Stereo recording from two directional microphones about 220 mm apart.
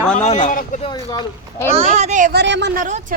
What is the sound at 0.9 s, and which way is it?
Speech, 20° left (ahead or behind).